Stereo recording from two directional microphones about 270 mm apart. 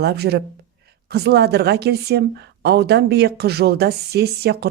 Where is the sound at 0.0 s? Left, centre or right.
Right.